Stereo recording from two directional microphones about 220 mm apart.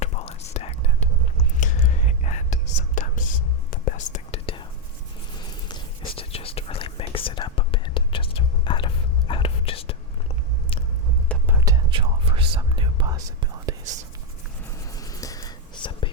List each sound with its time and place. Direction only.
0.0 s whispering: 30° left (ahead or behind)
11.4 s whispering: 15° right (ahead or behind)
14.9 s whispering: 15° left (ahead or behind)